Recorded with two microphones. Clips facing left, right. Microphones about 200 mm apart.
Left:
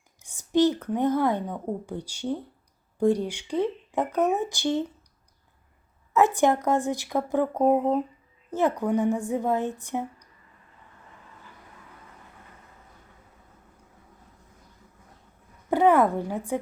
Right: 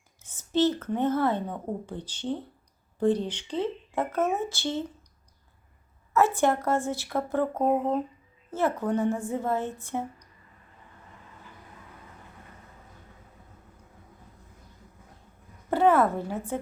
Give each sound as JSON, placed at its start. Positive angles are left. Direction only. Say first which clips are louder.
{"t": 0.2, "sound": "a woman's voice", "louder": "left 3 dB", "side_deg": 15}
{"t": 6.1, "sound": "a woman's voice", "louder": "left 2 dB", "side_deg": 15}
{"t": 15.7, "sound": "speech", "louder": "left 2 dB", "side_deg": 15}